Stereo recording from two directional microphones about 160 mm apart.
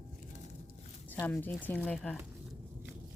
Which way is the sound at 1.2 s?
15° left (ahead or behind).